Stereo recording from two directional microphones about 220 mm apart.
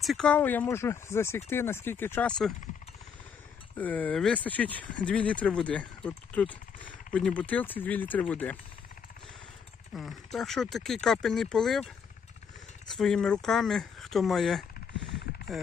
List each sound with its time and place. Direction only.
0.0 s speech: centre (ahead or behind)
3.8 s speech: 5° left (ahead or behind)
9.9 s speech: centre (ahead or behind)